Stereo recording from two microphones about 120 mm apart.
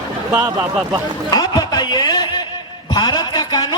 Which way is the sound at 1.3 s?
35° left (ahead or behind).